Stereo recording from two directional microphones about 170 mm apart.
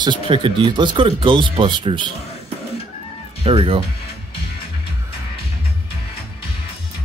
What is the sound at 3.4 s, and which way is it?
Speech, 35° right (ahead or behind).